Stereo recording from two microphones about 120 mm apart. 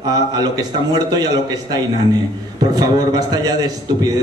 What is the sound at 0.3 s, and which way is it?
A man's voice, 35° right (ahead or behind).